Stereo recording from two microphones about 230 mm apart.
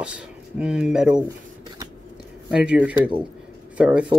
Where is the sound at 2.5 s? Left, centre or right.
Centre.